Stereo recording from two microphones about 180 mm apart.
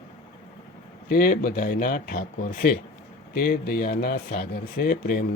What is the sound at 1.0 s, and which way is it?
Speech, 55° left (ahead or behind).